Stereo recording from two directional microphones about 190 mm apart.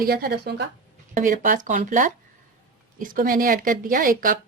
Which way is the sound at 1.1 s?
40° right (ahead or behind).